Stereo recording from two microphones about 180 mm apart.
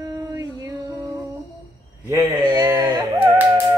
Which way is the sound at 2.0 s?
20° right (ahead or behind).